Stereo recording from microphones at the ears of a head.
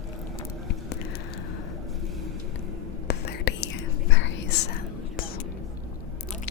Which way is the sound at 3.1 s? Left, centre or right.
Left.